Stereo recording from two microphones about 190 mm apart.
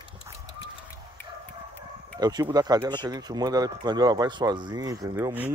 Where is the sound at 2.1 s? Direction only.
20° right (ahead or behind).